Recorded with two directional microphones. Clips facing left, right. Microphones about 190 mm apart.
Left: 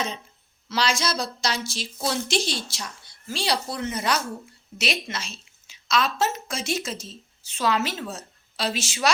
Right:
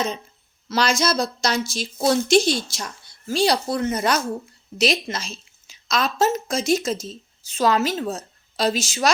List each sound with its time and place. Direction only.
0.7 s a woman's voice: 45° right (ahead or behind)